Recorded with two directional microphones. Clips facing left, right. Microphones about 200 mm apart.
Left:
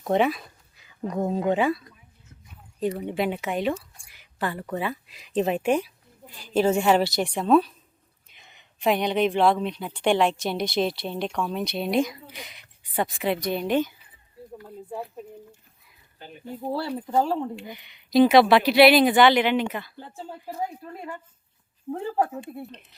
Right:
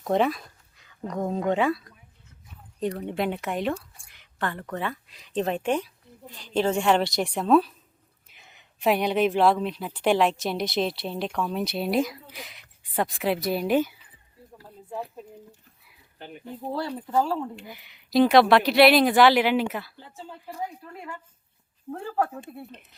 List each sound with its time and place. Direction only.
0.0 s speech: 5° left (ahead or behind)
16.6 s speech: 5° left (ahead or behind)
17.1 s speech: 20° left (ahead or behind)
17.7 s speech: 5° right (ahead or behind)
20.0 s speech: 45° left (ahead or behind)
21.9 s speech: 20° left (ahead or behind)